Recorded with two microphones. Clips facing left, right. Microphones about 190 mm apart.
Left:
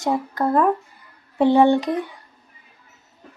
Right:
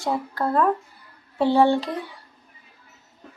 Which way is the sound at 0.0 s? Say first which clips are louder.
Left 3 dB; 20° left (ahead or behind).